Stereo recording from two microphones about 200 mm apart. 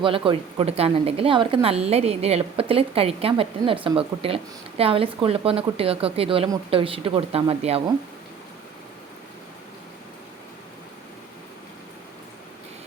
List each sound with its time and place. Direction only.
0.0 s speech: 25° right (ahead or behind)